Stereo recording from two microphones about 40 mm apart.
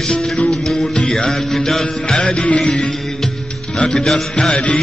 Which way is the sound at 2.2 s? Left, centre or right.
Left.